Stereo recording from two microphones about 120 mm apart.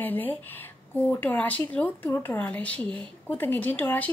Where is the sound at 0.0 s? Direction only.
15° left (ahead or behind).